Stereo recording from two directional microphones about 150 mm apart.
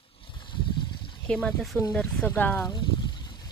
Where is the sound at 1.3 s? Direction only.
10° left (ahead or behind).